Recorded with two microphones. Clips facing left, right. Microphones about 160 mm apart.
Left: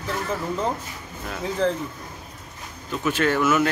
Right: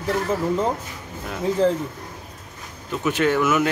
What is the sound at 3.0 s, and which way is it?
Speech, 15° right (ahead or behind).